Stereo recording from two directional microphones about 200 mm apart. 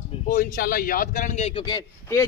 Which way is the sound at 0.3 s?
45° left (ahead or behind).